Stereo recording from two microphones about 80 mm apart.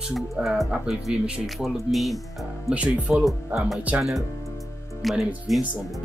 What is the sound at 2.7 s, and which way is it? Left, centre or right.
Speech, centre.